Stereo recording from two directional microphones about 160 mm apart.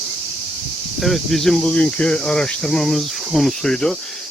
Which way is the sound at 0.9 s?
Centre (ahead or behind).